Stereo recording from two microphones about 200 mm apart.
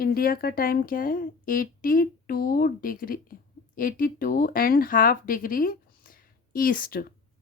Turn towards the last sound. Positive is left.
turn(degrees=45)  # may be behind; listen again after turning